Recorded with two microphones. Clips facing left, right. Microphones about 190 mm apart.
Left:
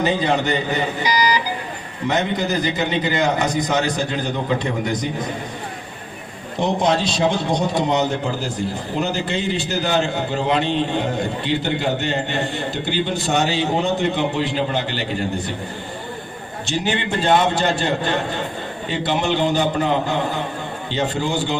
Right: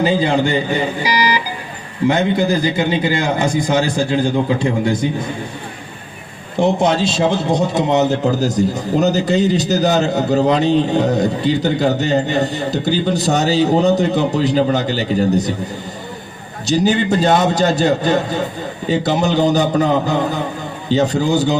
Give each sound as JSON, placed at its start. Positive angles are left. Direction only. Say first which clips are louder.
{"t": 0.0, "sound": "a man's voice", "louder": "right 4 dB", "side_deg": -30}
{"t": 2.1, "sound": "a man's voice", "louder": "right 2 dB", "side_deg": -30}
{"t": 6.6, "sound": "a man's voice", "louder": "right 4 dB", "side_deg": -25}
{"t": 8.4, "sound": "a man's voice", "louder": "right 8 dB", "side_deg": -40}
{"t": 16.6, "sound": "a man's voice", "louder": "right 8 dB", "side_deg": -40}